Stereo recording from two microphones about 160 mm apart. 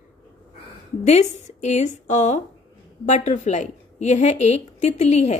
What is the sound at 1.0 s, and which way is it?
A woman's voice, 45° left (ahead or behind).